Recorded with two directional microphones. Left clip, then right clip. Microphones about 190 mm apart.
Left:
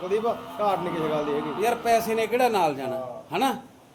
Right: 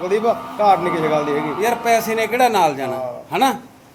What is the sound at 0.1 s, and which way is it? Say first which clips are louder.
A man's voice: right 7 dB; 35° right (ahead or behind).